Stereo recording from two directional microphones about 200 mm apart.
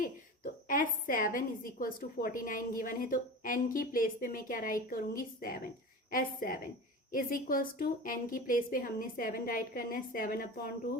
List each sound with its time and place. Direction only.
0.7 s a woman's voice: 40° left (ahead or behind)